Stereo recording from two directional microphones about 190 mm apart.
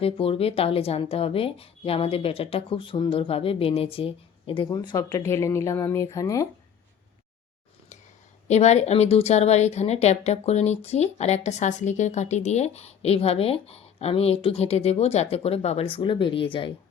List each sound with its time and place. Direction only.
0.0 s a woman's voice: 30° left (ahead or behind)
8.4 s speech: 35° left (ahead or behind)